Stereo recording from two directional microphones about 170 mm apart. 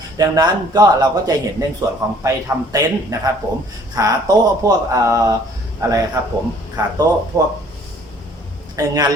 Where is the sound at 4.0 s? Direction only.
20° right (ahead or behind).